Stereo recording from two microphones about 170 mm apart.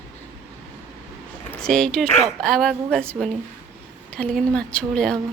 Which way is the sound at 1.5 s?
5° left (ahead or behind).